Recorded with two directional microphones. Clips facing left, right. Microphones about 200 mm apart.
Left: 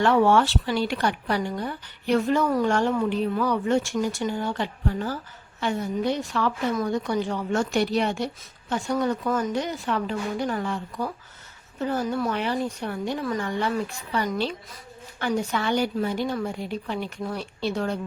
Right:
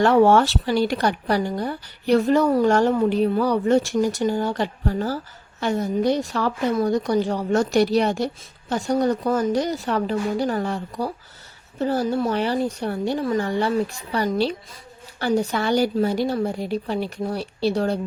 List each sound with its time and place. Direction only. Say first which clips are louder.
0.0 s speech: right 4 dB; 40° right (ahead or behind)